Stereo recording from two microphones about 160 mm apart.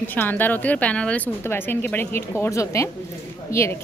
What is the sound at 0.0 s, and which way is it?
A woman's voice, 10° left (ahead or behind).